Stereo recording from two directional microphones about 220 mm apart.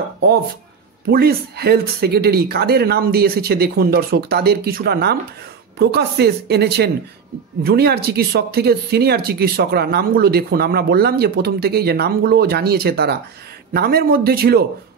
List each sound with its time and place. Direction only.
1.0 s speech: 45° right (ahead or behind)